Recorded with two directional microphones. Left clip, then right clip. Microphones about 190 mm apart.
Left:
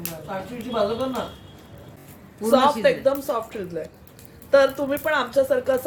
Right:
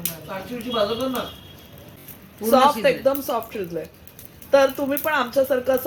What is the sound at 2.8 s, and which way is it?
Speech, 35° right (ahead or behind).